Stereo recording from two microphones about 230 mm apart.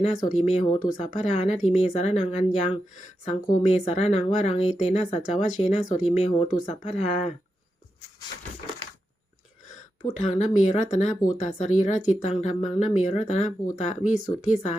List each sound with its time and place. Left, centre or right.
0.0 s speech: left
10.2 s speech: left